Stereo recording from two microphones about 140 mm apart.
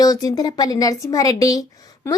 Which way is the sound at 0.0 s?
25° left (ahead or behind).